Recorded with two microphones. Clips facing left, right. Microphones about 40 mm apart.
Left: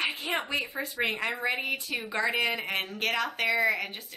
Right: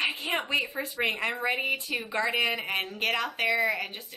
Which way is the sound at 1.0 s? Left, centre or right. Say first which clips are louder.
Right 1 dB; centre.